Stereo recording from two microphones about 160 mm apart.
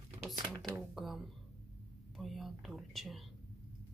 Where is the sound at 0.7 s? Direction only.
Centre (ahead or behind).